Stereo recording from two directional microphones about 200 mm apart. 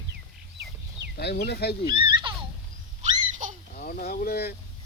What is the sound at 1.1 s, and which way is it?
Speech, 55° left (ahead or behind).